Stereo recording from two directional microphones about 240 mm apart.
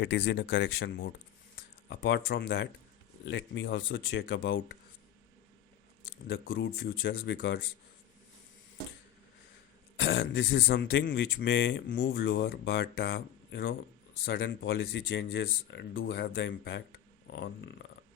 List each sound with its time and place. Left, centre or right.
0.0 s speech: left
1.9 s speech: left
6.1 s speech: left
10.0 s speech: left